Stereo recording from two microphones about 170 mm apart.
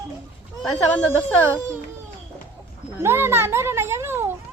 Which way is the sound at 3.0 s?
15° right (ahead or behind).